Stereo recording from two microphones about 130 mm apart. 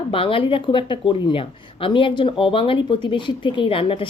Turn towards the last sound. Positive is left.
turn(degrees=45)  # may be behind; listen again after turning